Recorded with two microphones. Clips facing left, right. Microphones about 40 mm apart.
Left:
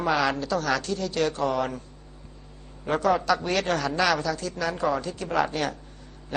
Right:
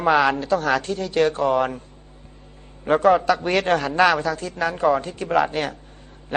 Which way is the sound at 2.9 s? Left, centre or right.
Right.